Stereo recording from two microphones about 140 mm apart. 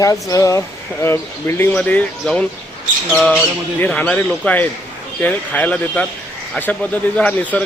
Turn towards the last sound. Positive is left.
turn(degrees=10)  # may be behind; listen again after turning